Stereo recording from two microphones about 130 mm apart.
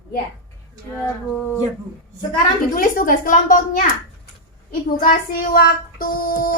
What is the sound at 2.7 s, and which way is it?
Speech, 90° left.